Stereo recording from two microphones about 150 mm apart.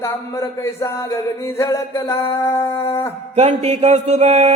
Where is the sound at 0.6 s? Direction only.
20° left (ahead or behind).